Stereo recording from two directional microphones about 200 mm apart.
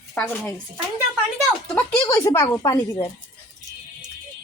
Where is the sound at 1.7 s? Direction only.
10° left (ahead or behind).